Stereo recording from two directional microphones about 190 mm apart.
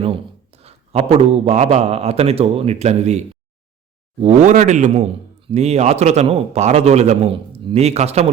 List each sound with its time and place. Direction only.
0.0 s a man's voice: 30° right (ahead or behind)